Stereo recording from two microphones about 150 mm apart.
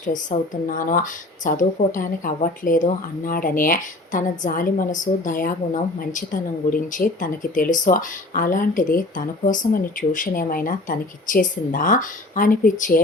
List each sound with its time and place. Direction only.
0.0 s speech: 60° left (ahead or behind)